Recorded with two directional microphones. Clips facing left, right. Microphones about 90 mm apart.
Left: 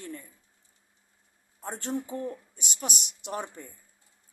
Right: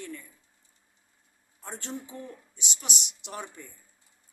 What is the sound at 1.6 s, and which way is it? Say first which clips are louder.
A woman's voice: left 6 dB; 40° left (ahead or behind).